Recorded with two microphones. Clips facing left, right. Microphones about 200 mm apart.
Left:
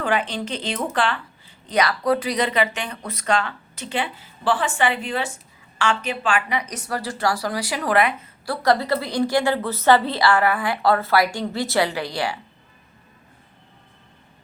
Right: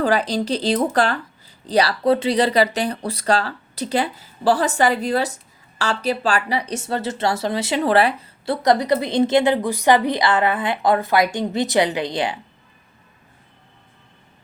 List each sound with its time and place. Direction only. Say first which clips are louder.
0.0 s a woman's voice: right 4 dB; 35° right (ahead or behind)
8.6 s a woman's voice: right 2 dB; 20° right (ahead or behind)